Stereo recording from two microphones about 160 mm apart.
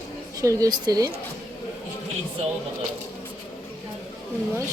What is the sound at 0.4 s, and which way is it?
Speech, 20° right (ahead or behind).